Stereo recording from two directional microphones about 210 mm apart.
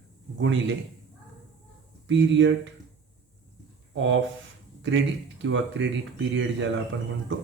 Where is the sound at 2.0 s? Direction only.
60° right (ahead or behind).